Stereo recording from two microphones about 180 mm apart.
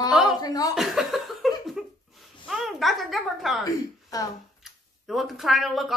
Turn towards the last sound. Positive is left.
turn(degrees=0)  # may be behind; listen again after turning